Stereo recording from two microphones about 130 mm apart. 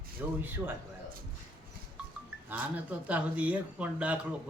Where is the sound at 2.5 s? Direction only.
15° right (ahead or behind).